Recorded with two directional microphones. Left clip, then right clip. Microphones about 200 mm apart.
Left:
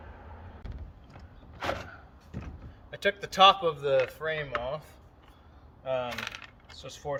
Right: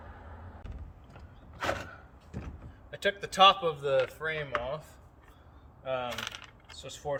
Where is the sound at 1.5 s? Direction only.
15° right (ahead or behind).